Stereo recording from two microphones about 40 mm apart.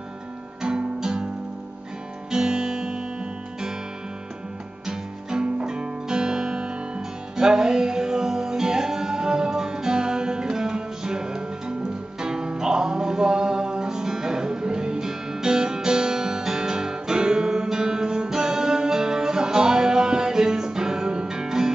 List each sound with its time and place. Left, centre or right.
0.6 s music: centre
2.3 s music: centre
4.8 s music: centre